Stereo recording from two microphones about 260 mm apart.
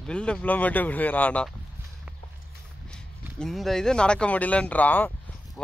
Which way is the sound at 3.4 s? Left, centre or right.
Centre.